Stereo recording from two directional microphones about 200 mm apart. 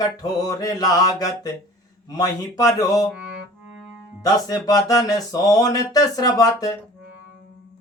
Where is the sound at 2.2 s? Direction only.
20° left (ahead or behind).